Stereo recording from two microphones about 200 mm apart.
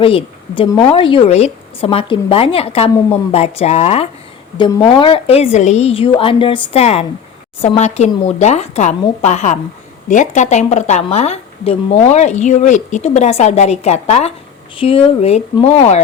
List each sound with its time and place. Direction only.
0.0 s a woman's voice: 25° left (ahead or behind)